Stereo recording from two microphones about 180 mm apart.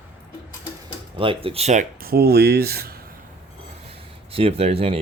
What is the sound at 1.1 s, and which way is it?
Speech, 30° right (ahead or behind).